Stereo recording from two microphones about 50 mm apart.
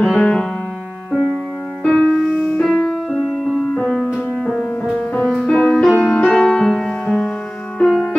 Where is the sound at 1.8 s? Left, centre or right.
Centre.